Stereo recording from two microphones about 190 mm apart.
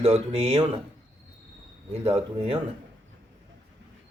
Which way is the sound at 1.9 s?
30° right (ahead or behind).